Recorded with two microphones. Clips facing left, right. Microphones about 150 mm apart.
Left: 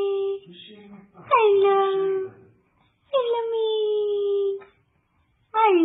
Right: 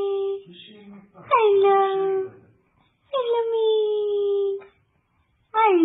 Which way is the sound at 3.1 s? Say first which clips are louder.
Right 1 dB; centre (ahead or behind).